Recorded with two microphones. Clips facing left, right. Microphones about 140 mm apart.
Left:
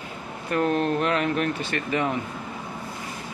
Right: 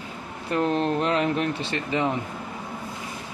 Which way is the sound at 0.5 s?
25° right (ahead or behind).